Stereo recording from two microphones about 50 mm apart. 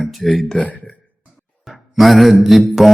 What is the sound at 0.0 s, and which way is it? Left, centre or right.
Speech, centre.